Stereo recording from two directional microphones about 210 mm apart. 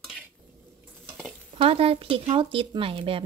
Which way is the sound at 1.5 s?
25° right (ahead or behind).